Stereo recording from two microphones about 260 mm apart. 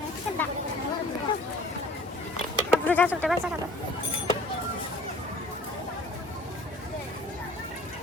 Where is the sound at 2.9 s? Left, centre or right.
Centre.